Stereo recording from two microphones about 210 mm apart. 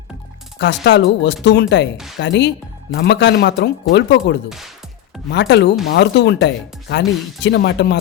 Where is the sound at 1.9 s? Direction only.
Centre (ahead or behind).